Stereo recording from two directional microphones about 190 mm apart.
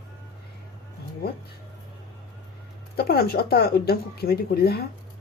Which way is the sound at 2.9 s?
55° left (ahead or behind).